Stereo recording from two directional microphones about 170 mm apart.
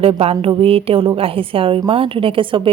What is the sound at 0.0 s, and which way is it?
A woman's voice, 35° right (ahead or behind).